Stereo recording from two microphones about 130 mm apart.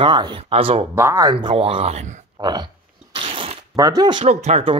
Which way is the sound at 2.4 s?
30° right (ahead or behind).